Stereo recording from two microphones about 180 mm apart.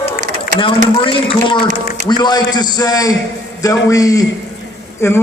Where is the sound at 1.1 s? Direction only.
30° left (ahead or behind).